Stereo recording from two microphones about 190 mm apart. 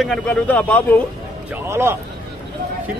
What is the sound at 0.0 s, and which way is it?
Speech, 5° left (ahead or behind).